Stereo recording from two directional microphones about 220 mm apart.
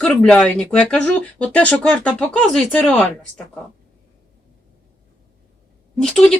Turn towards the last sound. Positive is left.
turn(degrees=5)  # may be behind; listen again after turning